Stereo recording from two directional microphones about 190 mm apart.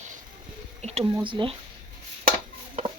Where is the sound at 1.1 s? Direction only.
25° right (ahead or behind).